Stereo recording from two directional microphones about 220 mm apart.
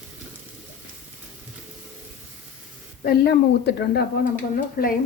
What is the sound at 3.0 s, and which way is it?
Speech, 45° left (ahead or behind).